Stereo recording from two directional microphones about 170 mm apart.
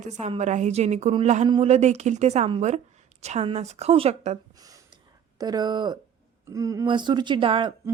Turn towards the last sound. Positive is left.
turn(degrees=-30)  # may be behind; listen again after turning